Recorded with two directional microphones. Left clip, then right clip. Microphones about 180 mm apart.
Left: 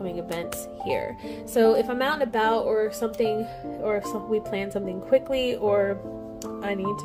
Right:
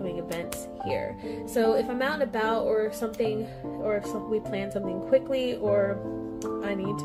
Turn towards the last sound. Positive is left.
turn(degrees=30)  # may be behind; listen again after turning